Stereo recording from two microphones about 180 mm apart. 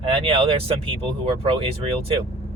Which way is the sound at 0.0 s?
30° right (ahead or behind).